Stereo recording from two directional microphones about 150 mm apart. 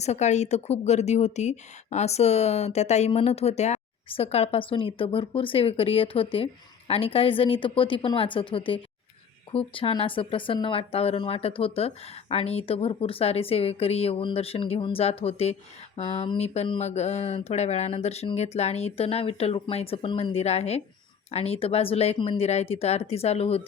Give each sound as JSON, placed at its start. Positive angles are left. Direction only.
{"t": 0.0, "sound": "speech", "side_deg": 50}